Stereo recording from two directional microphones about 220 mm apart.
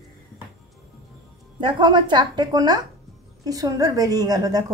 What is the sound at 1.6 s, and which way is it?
A woman's voice, 20° right (ahead or behind).